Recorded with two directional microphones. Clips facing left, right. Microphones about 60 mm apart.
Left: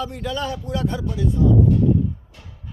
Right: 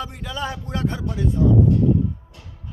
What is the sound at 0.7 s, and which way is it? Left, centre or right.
Speech, right.